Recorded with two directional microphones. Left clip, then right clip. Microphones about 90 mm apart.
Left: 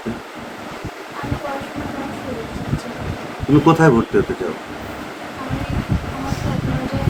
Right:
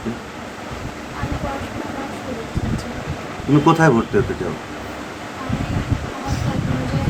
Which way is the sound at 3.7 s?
40° right (ahead or behind).